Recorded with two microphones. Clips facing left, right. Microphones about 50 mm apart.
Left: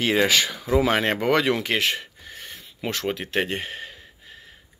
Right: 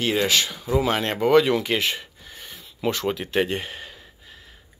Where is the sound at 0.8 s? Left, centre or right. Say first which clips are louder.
Left 1 dB; left.